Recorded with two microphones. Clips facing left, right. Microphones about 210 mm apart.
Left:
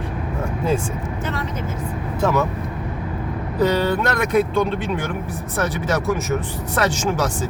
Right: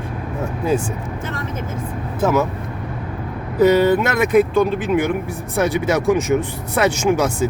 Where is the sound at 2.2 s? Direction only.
5° right (ahead or behind).